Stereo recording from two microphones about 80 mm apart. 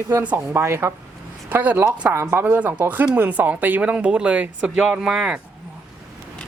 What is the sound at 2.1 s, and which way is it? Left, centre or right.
Speech, right.